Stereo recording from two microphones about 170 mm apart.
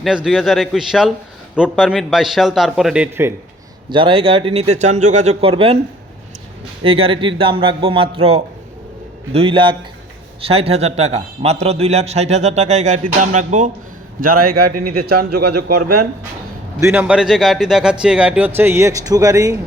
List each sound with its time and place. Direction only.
0.0 s a man's voice: 5° right (ahead or behind)
3.8 s speech: 30° right (ahead or behind)
6.8 s a man's voice: 35° right (ahead or behind)
14.2 s a man's voice: 55° right (ahead or behind)
16.8 s a man's voice: 10° right (ahead or behind)